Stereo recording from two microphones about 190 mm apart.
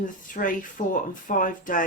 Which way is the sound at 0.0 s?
45° left (ahead or behind).